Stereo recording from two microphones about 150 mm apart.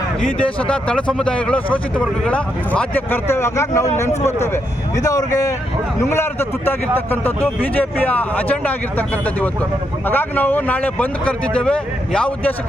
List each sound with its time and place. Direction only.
0.3 s speech: 5° left (ahead or behind)